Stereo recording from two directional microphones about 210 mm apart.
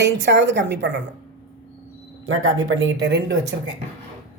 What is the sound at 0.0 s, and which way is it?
Speech, 55° right (ahead or behind).